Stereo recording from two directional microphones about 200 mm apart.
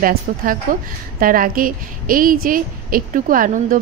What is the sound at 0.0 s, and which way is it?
A woman's voice, 45° right (ahead or behind).